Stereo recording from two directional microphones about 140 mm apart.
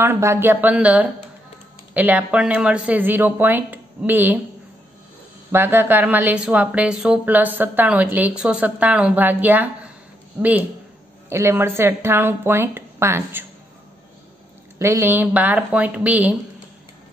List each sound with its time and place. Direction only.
0.0 s a woman's voice: 20° right (ahead or behind)
5.5 s a woman's voice: 15° right (ahead or behind)
14.8 s a woman's voice: 20° right (ahead or behind)